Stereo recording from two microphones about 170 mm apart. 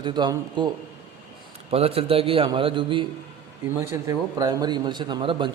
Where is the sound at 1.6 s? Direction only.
35° right (ahead or behind).